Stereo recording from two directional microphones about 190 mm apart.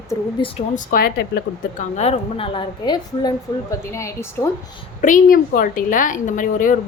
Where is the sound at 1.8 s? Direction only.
35° left (ahead or behind); by 4.3 s 15° left (ahead or behind).